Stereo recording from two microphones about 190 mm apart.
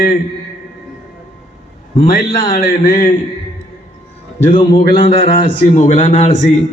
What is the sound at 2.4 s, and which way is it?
Speech, 20° left (ahead or behind).